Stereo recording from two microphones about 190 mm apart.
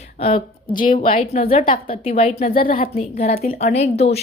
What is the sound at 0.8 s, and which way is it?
Speech, 45° left (ahead or behind).